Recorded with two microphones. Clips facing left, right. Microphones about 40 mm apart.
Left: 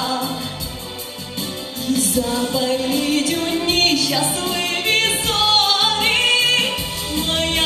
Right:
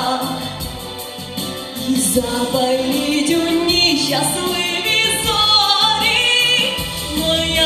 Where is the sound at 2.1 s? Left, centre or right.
Right.